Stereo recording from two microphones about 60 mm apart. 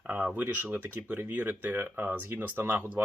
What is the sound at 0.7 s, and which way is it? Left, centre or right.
Speech, right.